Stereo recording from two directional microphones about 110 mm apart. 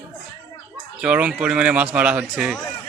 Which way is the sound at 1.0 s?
10° right (ahead or behind).